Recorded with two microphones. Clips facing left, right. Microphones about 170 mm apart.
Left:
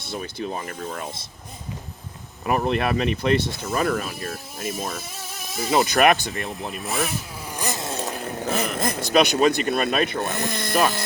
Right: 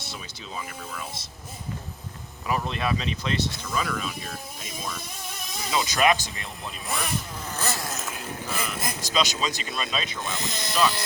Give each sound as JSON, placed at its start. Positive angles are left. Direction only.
{"t": 0.0, "sound": "speech", "side_deg": 55}
{"t": 2.4, "sound": "speech", "side_deg": 55}
{"t": 7.5, "sound": "zipper", "side_deg": 15}
{"t": 8.2, "sound": "speech", "side_deg": 55}